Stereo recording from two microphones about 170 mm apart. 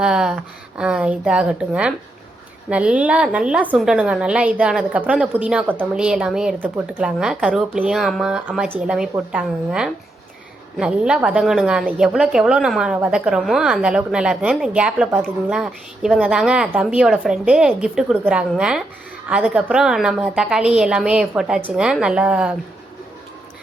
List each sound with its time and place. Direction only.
0.0 s a woman's voice: 5° right (ahead or behind)